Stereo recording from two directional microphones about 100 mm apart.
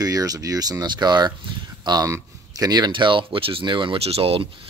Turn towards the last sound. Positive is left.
turn(degrees=-70)  # may be behind; listen again after turning